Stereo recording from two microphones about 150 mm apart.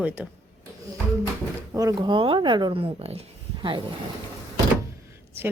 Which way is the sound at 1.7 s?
20° right (ahead or behind).